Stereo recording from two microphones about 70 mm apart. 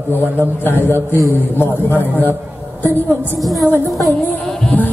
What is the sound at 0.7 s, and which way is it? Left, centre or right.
A man's voice, left.